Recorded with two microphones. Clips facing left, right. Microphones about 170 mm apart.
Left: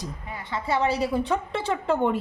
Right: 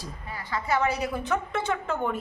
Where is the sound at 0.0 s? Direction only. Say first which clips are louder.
Left 3 dB; 20° left (ahead or behind).